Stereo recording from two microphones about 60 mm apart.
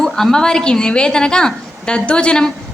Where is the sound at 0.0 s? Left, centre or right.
Centre.